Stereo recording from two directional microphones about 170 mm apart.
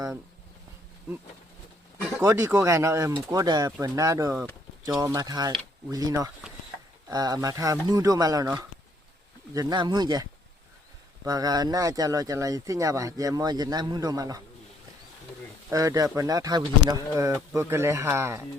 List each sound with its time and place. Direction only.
2.2 s speech: 15° right (ahead or behind)
9.6 s speech: 25° right (ahead or behind)
11.3 s speech: 20° right (ahead or behind)
15.7 s speech: 20° right (ahead or behind)